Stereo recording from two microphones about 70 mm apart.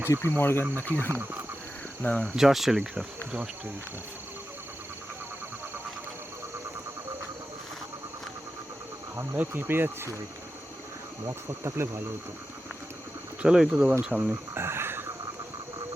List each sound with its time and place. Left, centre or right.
0.1 s speech: left
1.1 s speech: right
2.3 s speech: centre
9.1 s speech: right
11.3 s speech: right
13.4 s speech: centre
14.1 s speech: centre
14.5 s insect: right